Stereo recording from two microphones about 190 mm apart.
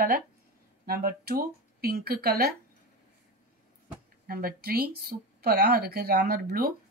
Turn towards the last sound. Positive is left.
turn(degrees=-50)  # may be behind; listen again after turning